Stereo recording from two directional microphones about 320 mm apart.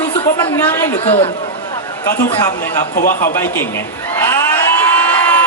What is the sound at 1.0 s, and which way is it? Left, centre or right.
Speech, centre.